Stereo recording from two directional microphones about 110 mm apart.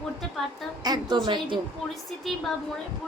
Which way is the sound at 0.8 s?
40° right (ahead or behind).